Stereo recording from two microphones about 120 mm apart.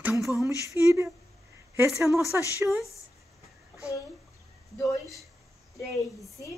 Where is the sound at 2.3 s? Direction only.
15° right (ahead or behind).